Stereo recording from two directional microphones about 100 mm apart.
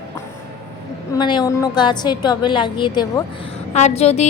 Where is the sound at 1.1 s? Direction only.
45° left (ahead or behind).